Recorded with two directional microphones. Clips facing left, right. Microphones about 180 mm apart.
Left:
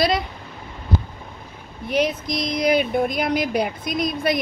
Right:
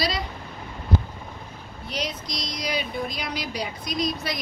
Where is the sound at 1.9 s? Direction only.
55° left (ahead or behind).